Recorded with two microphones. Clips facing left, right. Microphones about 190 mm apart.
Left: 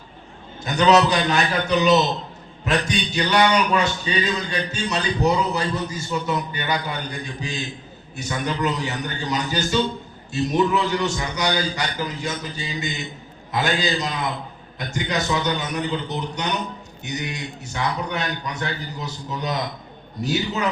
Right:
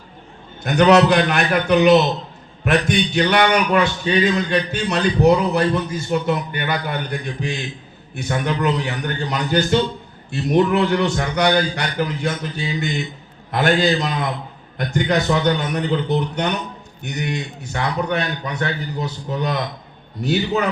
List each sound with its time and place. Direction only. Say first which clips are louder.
0.6 s a man's voice: right 4 dB; 60° right (ahead or behind)